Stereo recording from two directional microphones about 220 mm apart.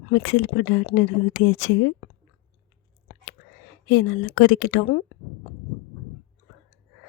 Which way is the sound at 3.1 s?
35° left (ahead or behind).